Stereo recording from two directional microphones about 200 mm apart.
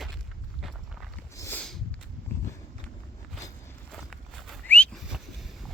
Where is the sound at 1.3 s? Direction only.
10° left (ahead or behind).